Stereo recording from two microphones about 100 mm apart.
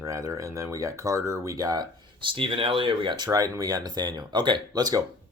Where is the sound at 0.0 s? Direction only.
30° right (ahead or behind).